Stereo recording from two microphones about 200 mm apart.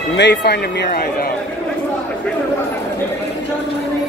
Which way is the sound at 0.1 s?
60° left (ahead or behind).